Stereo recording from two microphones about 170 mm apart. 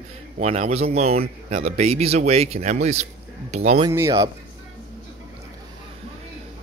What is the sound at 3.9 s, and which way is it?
Speech, 20° right (ahead or behind).